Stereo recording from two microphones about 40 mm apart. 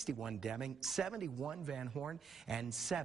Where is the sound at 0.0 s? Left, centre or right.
Centre.